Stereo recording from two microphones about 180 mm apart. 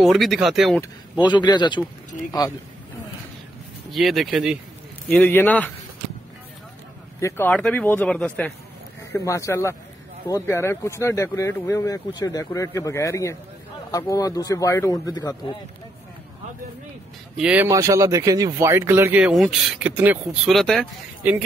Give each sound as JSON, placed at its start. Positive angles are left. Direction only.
{"t": 0.0, "sound": "speech", "side_deg": 0}
{"t": 1.2, "sound": "a man's voice", "side_deg": 25}
{"t": 3.9, "sound": "speech", "side_deg": 0}
{"t": 5.1, "sound": "speech", "side_deg": 10}
{"t": 7.2, "sound": "speech", "side_deg": 15}
{"t": 9.1, "sound": "a man's voice", "side_deg": 15}
{"t": 17.4, "sound": "speech", "side_deg": -5}
{"t": 17.6, "sound": "speech", "side_deg": -20}